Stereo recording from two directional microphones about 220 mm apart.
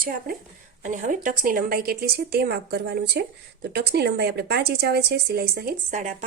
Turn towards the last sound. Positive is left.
turn(degrees=-35)  # may be behind; listen again after turning